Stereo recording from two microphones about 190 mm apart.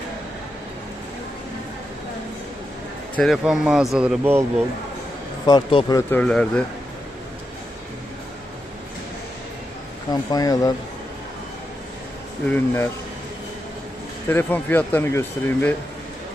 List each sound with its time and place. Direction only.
3.2 s a man's voice: centre (ahead or behind)
5.5 s speech: 20° left (ahead or behind); by 6.5 s 5° left (ahead or behind)
10.1 s speech: 20° left (ahead or behind)
12.5 s speech: 10° left (ahead or behind)
14.3 s speech: 10° left (ahead or behind)